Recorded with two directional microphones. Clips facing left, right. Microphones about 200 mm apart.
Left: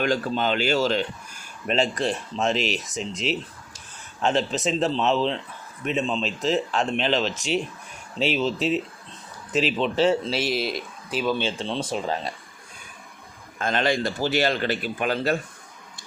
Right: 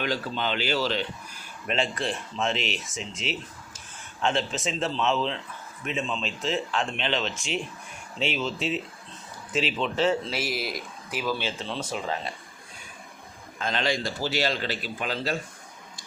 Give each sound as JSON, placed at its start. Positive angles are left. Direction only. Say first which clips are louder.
{"t": 0.0, "sound": "a man's voice", "louder": "left 5 dB", "side_deg": 45}
{"t": 13.6, "sound": "speech", "louder": "left 4 dB", "side_deg": 50}